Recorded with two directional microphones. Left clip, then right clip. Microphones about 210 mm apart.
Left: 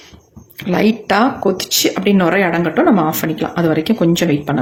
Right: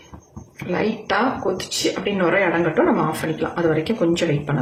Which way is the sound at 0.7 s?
45° left (ahead or behind).